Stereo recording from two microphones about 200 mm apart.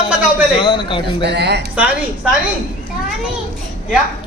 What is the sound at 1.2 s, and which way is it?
Speech, 55° right (ahead or behind).